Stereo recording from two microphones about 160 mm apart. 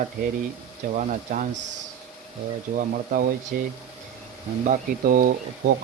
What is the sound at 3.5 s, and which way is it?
Speech, 70° right (ahead or behind).